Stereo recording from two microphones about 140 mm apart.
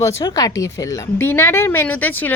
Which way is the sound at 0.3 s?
25° left (ahead or behind).